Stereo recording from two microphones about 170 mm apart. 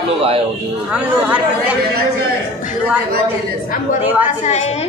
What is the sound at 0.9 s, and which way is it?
Speech, 10° right (ahead or behind).